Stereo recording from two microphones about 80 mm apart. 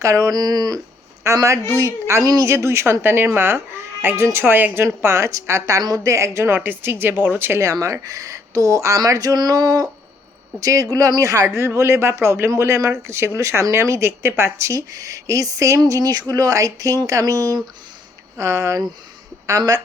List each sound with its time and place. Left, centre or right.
0.0 s speech: right
1.2 s speech: right
2.2 s speech: right
2.5 s speech: right
7.7 s speech: right